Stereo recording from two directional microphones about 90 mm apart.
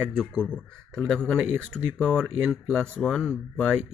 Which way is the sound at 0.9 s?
10° left (ahead or behind).